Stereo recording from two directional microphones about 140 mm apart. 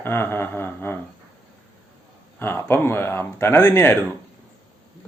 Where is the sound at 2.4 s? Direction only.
15° left (ahead or behind).